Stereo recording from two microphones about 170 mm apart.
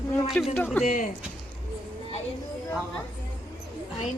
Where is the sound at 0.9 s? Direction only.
50° left (ahead or behind).